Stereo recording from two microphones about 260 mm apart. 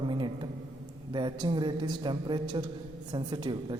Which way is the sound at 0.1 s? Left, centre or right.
Centre.